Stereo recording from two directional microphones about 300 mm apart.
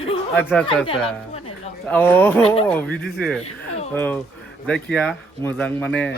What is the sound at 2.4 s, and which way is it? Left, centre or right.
Speech, centre.